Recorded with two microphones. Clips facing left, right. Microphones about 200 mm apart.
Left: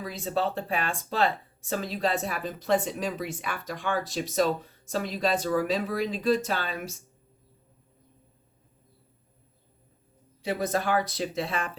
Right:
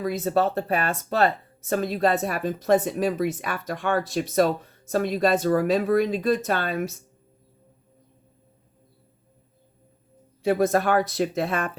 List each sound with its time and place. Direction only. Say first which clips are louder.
0.0 s speech: right 6 dB; 50° right (ahead or behind)
10.4 s speech: right 7 dB; 55° right (ahead or behind)